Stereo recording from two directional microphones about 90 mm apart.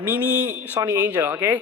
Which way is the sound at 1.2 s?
30° right (ahead or behind).